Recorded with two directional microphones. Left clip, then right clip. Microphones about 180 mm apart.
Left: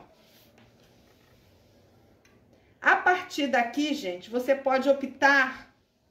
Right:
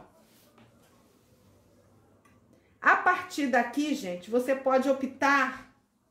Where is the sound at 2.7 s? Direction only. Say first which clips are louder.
Left 1 dB; 55° right (ahead or behind).